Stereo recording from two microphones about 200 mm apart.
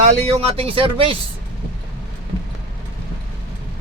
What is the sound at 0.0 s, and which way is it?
Speech, 30° right (ahead or behind).